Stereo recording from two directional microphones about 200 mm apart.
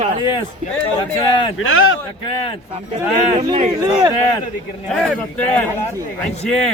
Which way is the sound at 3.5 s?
30° right (ahead or behind).